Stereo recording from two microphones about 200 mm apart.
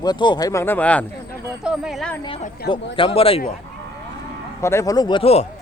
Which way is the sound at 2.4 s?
50° left (ahead or behind).